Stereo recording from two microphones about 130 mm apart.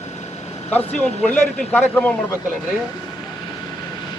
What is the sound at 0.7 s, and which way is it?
A man's voice, 10° left (ahead or behind).